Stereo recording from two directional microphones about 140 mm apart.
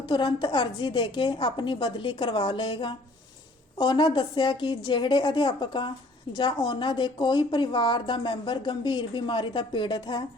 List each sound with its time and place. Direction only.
0.0 s a woman's voice: 35° left (ahead or behind)